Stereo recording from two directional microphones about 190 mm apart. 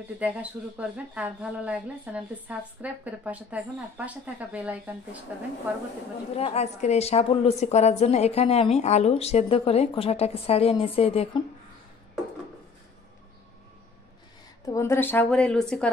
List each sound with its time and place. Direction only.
0.2 s speech: 5° right (ahead or behind)
6.3 s a woman's voice: 35° left (ahead or behind)
14.7 s speech: 15° left (ahead or behind)